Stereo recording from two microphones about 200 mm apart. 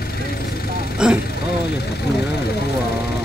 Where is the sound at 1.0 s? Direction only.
5° right (ahead or behind).